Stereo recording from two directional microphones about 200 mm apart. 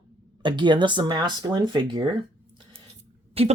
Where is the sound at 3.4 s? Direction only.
30° right (ahead or behind).